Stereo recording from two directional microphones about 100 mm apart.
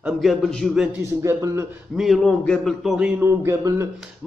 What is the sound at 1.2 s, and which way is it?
Speech, 30° right (ahead or behind).